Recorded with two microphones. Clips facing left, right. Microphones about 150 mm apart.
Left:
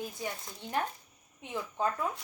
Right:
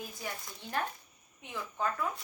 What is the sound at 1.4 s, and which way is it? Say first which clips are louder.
Speech: left 3 dB; 25° left (ahead or behind).